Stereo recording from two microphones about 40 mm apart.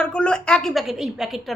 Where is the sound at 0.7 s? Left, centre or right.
Centre.